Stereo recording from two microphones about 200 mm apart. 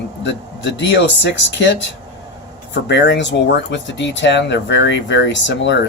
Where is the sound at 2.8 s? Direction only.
60° left (ahead or behind).